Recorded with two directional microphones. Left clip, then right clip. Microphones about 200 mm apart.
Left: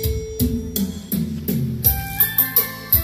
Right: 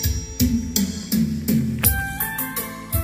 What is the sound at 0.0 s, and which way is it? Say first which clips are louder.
Music: left 1 dB; 50° left (ahead or behind).